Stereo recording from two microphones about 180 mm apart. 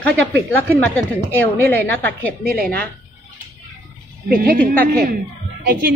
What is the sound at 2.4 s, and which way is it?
Speech, 55° right (ahead or behind).